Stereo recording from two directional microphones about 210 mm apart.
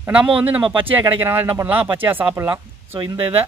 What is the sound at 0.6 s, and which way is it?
Speech, 25° right (ahead or behind).